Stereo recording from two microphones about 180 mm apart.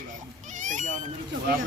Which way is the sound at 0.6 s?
45° right (ahead or behind).